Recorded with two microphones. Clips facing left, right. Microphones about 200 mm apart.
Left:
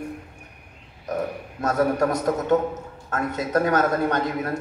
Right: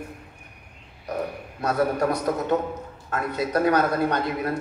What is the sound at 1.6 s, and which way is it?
A man's voice, 45° left (ahead or behind).